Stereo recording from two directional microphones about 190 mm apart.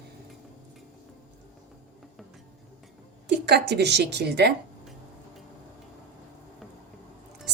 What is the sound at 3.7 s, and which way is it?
Speech, 60° right (ahead or behind).